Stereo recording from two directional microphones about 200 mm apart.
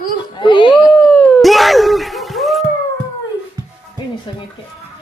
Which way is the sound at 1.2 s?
5° left (ahead or behind).